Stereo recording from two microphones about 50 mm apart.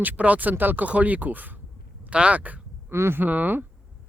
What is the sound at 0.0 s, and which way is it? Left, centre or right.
Speech, right.